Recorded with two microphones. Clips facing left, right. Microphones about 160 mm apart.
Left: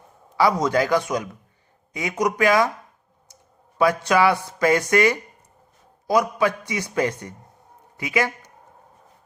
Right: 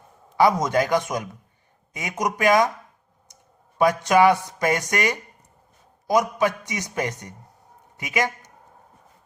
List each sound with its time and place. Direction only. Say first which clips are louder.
0.3 s a man's voice: even; 20° right (ahead or behind)
3.8 s a man's voice: right 1 dB; 20° right (ahead or behind)